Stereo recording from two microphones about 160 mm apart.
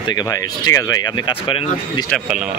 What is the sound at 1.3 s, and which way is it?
Speech, 35° left (ahead or behind).